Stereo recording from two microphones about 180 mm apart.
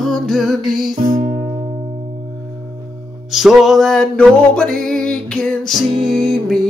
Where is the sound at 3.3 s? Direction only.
Centre (ahead or behind).